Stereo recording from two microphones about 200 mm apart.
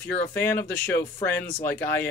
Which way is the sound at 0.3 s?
10° left (ahead or behind).